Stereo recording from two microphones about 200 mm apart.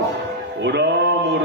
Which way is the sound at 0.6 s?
60° right (ahead or behind).